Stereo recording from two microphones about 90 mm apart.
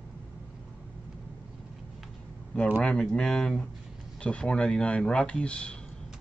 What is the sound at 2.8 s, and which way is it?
Speech, 10° left (ahead or behind).